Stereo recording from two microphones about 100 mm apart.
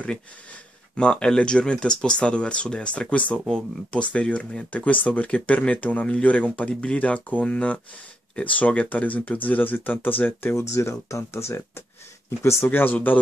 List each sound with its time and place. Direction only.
0.9 s speech: 10° left (ahead or behind)
10.6 s speech: 30° left (ahead or behind)